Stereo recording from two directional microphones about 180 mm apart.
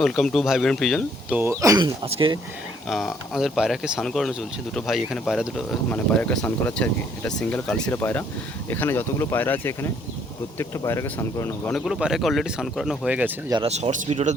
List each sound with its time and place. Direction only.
0.0 s speech: 5° left (ahead or behind)
1.4 s speech: 15° right (ahead or behind)
2.0 s speech: 30° right (ahead or behind)
2.9 s speech: centre (ahead or behind)
11.7 s speech: 5° right (ahead or behind)
13.7 s speech: 35° right (ahead or behind)